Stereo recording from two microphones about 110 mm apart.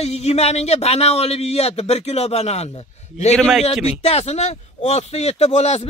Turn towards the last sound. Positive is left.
turn(degrees=90)